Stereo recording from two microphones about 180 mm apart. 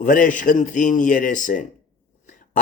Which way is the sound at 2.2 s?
45° left (ahead or behind).